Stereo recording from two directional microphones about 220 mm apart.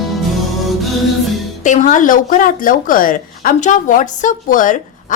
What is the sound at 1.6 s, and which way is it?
Speech, 35° left (ahead or behind).